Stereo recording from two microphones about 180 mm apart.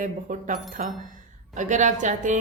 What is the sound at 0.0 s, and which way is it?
A woman's voice, 45° right (ahead or behind).